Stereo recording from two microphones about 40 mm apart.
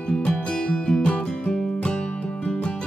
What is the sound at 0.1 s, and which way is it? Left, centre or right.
Music, left.